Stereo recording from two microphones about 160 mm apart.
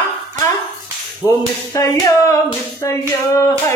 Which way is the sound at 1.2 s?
20° left (ahead or behind).